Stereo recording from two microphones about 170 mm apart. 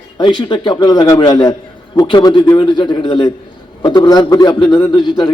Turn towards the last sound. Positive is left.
turn(degrees=25)  # may be behind; listen again after turning